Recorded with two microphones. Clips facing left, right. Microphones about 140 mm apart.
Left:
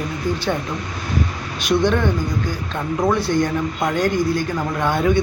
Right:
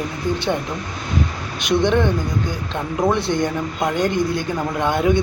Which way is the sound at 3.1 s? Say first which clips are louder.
Left 1 dB; 20° right (ahead or behind).